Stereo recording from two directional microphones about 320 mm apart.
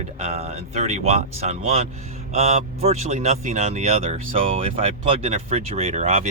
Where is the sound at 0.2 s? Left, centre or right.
Right.